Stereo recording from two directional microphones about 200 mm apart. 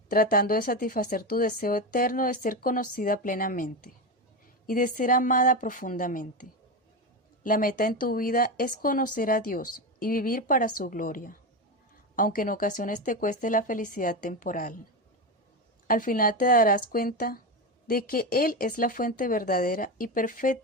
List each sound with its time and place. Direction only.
0.1 s a woman's voice: 45° left (ahead or behind)
15.9 s a woman's voice: 45° left (ahead or behind)